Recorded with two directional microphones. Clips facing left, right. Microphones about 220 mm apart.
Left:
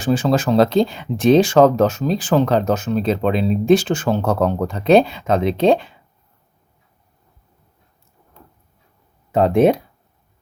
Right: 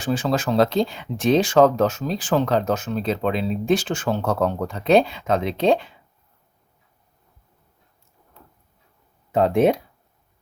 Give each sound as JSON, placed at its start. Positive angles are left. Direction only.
{"t": 0.0, "sound": "speech", "side_deg": 30}
{"t": 9.3, "sound": "speech", "side_deg": 45}